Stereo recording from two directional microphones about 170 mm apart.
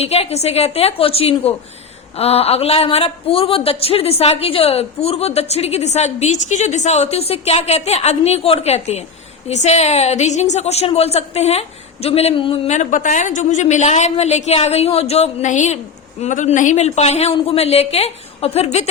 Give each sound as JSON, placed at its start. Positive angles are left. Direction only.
{"t": 0.0, "sound": "a woman's voice", "side_deg": 40}